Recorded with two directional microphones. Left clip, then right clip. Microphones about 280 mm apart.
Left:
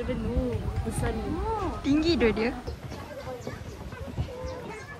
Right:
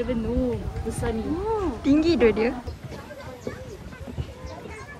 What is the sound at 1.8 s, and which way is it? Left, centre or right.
Speech, centre.